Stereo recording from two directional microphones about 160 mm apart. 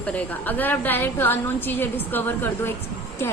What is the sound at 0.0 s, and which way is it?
A woman's voice, 10° left (ahead or behind).